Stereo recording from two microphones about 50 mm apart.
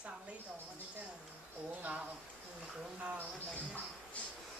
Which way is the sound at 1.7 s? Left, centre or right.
Right.